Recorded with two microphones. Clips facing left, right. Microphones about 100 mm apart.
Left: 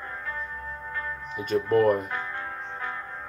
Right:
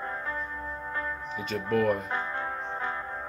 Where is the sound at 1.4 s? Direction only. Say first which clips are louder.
Left 5 dB; 45° left (ahead or behind).